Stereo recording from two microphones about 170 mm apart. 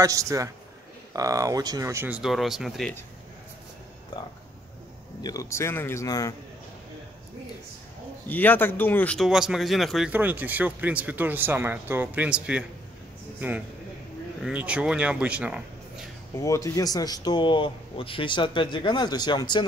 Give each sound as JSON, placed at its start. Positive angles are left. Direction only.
{"t": 0.0, "sound": "a man's voice", "side_deg": -20}
{"t": 5.2, "sound": "speech", "side_deg": 20}
{"t": 8.3, "sound": "speech", "side_deg": 10}
{"t": 14.4, "sound": "speech", "side_deg": -5}
{"t": 16.3, "sound": "speech", "side_deg": 20}